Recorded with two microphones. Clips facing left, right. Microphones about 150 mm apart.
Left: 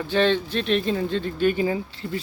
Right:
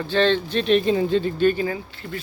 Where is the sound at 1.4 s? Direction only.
20° left (ahead or behind).